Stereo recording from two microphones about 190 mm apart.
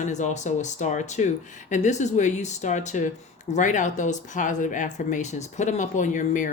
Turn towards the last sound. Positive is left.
turn(degrees=40)  # may be behind; listen again after turning